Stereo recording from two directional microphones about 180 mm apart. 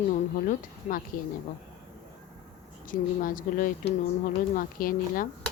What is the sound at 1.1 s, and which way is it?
Speech, 50° left (ahead or behind).